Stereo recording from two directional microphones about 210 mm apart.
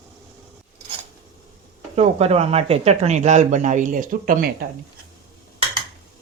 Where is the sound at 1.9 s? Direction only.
30° right (ahead or behind).